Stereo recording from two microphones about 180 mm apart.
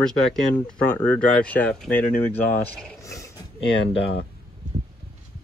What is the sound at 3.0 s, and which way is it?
Dog, 15° left (ahead or behind).